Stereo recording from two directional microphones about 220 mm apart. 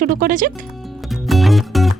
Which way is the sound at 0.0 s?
40° right (ahead or behind).